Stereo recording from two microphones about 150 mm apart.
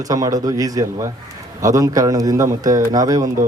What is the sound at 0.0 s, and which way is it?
A man's voice, 25° right (ahead or behind).